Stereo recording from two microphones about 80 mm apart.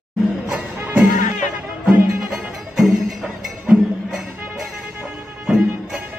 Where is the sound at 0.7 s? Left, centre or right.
Right.